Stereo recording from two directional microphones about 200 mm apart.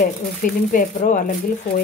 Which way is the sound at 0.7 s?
40° left (ahead or behind).